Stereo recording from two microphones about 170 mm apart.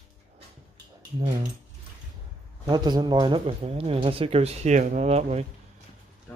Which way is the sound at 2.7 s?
25° right (ahead or behind).